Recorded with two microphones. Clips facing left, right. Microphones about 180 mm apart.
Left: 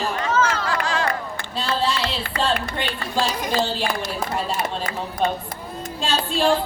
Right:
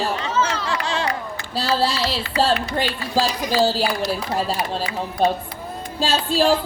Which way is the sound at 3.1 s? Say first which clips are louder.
Right 2 dB; 50° left (ahead or behind).